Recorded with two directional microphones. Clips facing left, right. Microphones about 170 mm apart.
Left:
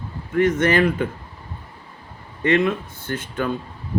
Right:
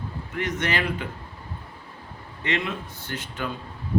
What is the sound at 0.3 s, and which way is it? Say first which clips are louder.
Speech: left 10 dB; 50° left (ahead or behind).